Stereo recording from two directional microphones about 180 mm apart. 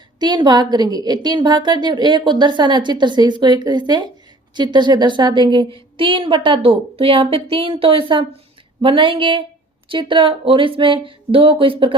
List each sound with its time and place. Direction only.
0.2 s a woman's voice: 25° right (ahead or behind)